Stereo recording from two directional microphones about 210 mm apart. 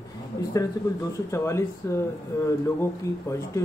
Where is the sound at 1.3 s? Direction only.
15° left (ahead or behind).